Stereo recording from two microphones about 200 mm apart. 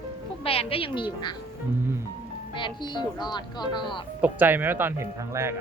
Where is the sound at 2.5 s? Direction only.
25° left (ahead or behind).